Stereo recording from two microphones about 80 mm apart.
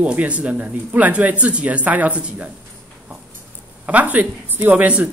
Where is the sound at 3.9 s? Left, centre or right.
Right.